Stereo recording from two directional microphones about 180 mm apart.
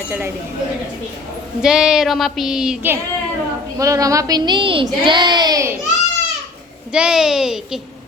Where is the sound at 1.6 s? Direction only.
5° right (ahead or behind).